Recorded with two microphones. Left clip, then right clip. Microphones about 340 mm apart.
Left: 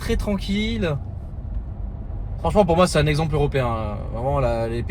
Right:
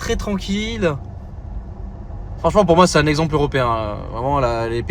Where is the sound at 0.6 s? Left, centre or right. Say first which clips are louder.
Right 1 dB; right.